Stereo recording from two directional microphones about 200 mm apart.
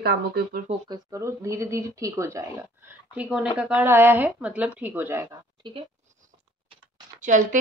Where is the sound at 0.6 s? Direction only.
20° right (ahead or behind).